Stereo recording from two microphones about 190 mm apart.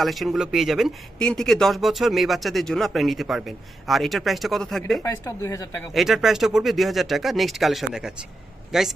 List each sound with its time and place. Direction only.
0.0 s speech: centre (ahead or behind)
5.0 s speech: 15° left (ahead or behind)
5.9 s speech: centre (ahead or behind)